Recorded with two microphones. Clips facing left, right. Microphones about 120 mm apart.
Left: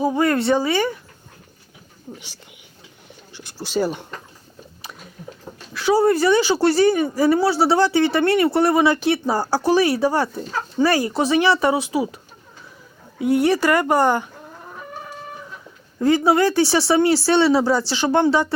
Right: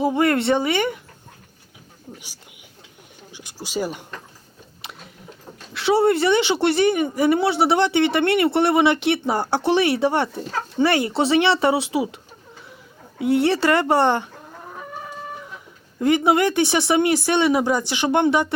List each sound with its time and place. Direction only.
0.0 s speech: 25° right (ahead or behind)
3.3 s speech: 10° right (ahead or behind)
5.7 s speech: 25° right (ahead or behind)
13.2 s speech: 25° right (ahead or behind)
16.0 s speech: 20° right (ahead or behind)